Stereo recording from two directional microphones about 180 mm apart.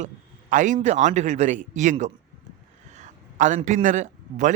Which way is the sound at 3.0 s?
45° right (ahead or behind).